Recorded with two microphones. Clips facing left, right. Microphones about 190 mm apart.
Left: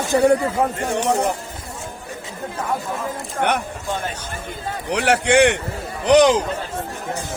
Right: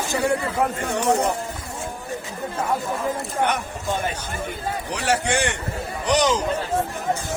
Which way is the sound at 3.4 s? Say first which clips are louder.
Left 3 dB; 65° left (ahead or behind).